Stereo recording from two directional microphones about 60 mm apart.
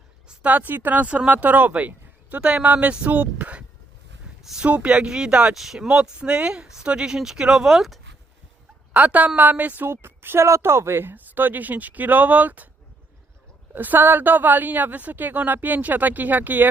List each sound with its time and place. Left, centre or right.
0.3 s speech: right
4.6 s speech: centre
5.5 s speech: centre
5.9 s speech: centre
8.9 s speech: right
9.8 s a woman's voice: right
13.7 s a woman's voice: right